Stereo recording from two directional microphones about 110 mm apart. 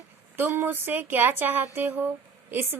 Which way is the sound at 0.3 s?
20° right (ahead or behind).